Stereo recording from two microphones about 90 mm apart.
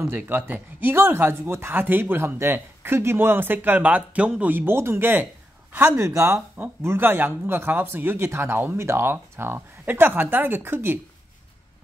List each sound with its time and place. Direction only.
0.0 s speech: 20° right (ahead or behind)
5.9 s speech: 30° right (ahead or behind)